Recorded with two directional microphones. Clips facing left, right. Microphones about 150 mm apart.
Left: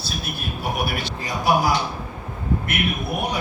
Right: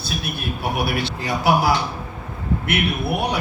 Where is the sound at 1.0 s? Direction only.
80° right.